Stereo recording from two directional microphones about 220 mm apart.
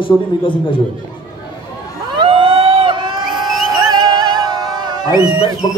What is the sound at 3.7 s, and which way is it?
Music, 20° right (ahead or behind).